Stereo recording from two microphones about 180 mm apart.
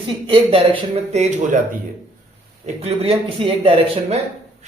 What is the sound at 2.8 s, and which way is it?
Speech, 35° right (ahead or behind).